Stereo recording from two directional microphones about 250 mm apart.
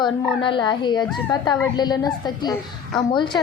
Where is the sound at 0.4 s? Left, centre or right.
Centre.